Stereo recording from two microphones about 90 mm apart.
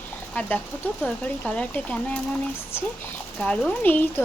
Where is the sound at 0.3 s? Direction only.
20° left (ahead or behind).